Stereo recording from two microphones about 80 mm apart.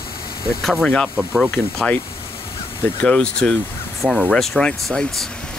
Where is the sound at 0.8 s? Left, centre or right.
Centre.